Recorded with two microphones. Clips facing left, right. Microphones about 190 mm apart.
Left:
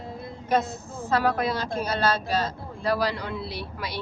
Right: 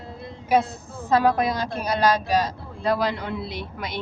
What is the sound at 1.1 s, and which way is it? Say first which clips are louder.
A woman's voice: right 4 dB; 20° right (ahead or behind).